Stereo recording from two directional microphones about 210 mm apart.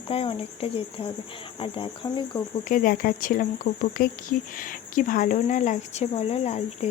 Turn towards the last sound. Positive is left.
turn(degrees=30)  # may be behind; listen again after turning